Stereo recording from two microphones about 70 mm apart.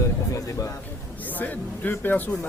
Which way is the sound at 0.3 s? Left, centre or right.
Left.